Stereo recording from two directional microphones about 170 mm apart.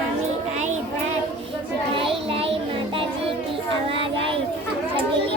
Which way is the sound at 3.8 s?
30° right (ahead or behind).